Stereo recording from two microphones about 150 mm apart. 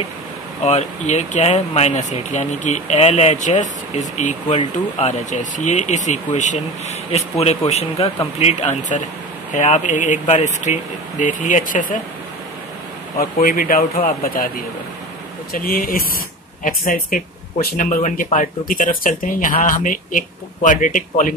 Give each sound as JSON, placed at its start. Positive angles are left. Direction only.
{"t": 0.7, "sound": "speech", "side_deg": 45}
{"t": 13.2, "sound": "speech", "side_deg": 80}
{"t": 15.5, "sound": "speech", "side_deg": 70}